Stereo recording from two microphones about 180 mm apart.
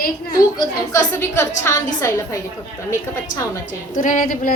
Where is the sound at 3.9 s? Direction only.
45° left (ahead or behind).